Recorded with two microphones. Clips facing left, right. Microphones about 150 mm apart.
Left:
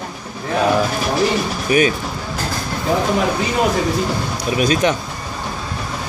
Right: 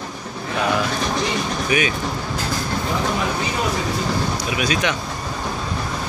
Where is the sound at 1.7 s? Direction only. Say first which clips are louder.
Left 6 dB; 40° left (ahead or behind).